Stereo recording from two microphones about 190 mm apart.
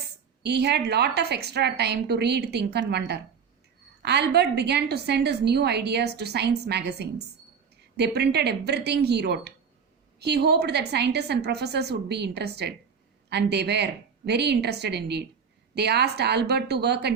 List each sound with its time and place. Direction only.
0.4 s a woman's voice: 60° right (ahead or behind)